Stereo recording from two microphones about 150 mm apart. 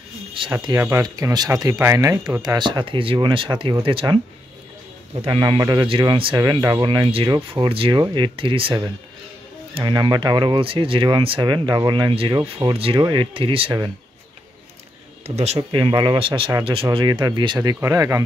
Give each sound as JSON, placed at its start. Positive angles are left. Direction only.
{"t": 0.5, "sound": "speech", "side_deg": -25}
{"t": 15.2, "sound": "speech", "side_deg": -45}